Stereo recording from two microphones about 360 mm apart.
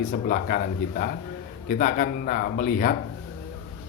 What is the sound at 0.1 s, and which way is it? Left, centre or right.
Speech, left.